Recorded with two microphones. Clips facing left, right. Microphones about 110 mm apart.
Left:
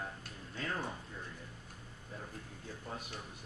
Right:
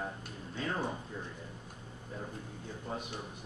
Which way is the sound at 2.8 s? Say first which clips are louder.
Right 5 dB; 15° right (ahead or behind).